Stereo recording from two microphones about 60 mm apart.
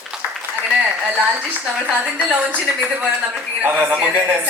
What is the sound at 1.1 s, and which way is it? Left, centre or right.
A man's voice, right.